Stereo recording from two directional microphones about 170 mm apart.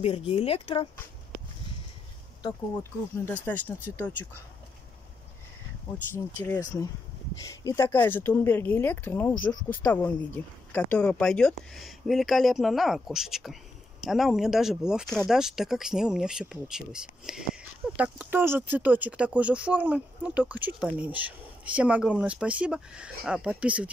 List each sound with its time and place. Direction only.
0.0 s speech: 35° left (ahead or behind)
2.8 s a woman's voice: 10° left (ahead or behind)
6.1 s a woman's voice: 10° left (ahead or behind); by 23.9 s 10° right (ahead or behind)